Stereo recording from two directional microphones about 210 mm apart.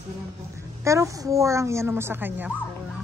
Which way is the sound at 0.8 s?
15° right (ahead or behind).